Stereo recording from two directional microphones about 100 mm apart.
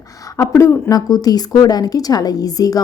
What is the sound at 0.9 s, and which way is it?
A woman's voice, 40° left (ahead or behind).